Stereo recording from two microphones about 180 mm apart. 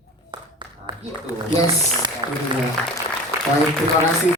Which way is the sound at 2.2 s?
25° right (ahead or behind).